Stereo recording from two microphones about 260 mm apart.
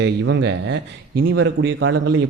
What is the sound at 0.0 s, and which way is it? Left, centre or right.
Speech, right.